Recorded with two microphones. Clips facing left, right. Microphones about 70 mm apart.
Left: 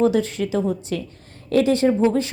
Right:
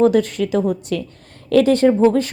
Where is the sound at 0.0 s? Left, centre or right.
Right.